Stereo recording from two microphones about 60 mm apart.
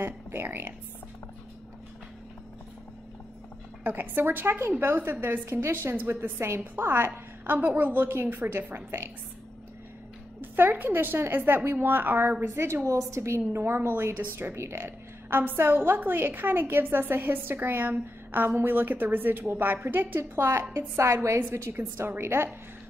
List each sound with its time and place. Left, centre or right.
0.0 s speech: right
3.8 s a woman's voice: right
7.4 s a woman's voice: right
10.4 s a woman's voice: right
14.3 s a woman's voice: right
15.2 s a woman's voice: right